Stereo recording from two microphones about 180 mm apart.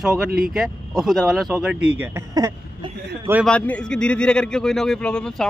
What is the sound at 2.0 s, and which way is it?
Speech, 15° right (ahead or behind).